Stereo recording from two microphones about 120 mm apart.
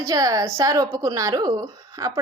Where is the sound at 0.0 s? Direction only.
30° right (ahead or behind).